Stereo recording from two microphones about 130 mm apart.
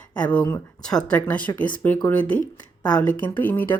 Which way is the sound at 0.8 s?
5° left (ahead or behind).